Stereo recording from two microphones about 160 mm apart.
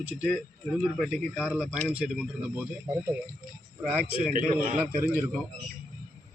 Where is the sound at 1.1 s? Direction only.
10° left (ahead or behind).